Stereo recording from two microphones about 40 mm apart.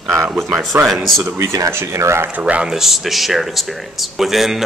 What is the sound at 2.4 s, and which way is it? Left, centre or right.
Speech, right.